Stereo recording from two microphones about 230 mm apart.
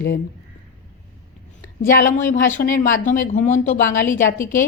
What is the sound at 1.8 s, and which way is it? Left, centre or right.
Speech, left.